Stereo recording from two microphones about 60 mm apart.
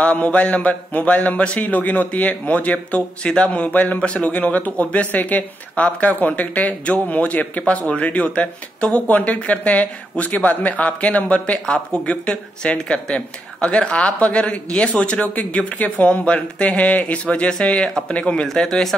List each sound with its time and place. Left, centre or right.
0.0 s a man's voice: left; by 18.9 s centre